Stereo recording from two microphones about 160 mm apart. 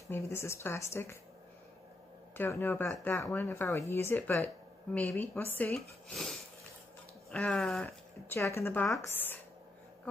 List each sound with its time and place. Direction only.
0.1 s speech: 15° left (ahead or behind)
2.3 s speech: 15° left (ahead or behind)
7.2 s a sound: 5° left (ahead or behind)
8.3 s speech: 15° left (ahead or behind)